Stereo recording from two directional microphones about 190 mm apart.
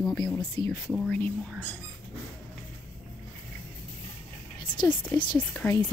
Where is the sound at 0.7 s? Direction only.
5° left (ahead or behind).